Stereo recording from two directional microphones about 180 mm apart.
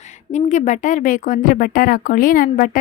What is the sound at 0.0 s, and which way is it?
A woman's voice, 40° left (ahead or behind).